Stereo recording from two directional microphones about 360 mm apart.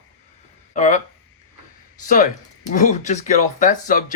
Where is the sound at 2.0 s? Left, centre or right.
Left.